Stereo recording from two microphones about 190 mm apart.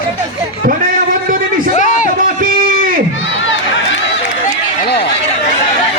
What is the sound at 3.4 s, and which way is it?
Run, 85° left.